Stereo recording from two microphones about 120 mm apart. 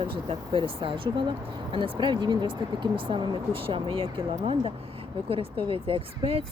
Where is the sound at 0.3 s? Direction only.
50° right (ahead or behind).